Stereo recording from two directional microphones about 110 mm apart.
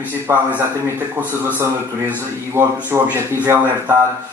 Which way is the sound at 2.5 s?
20° right (ahead or behind).